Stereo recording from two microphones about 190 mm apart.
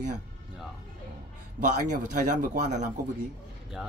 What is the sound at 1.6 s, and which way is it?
Speech, 40° right (ahead or behind).